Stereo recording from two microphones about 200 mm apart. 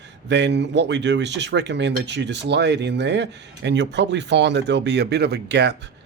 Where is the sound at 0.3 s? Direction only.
60° right (ahead or behind).